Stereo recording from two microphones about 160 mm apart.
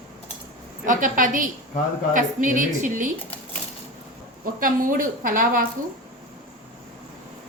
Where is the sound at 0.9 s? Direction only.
55° right (ahead or behind).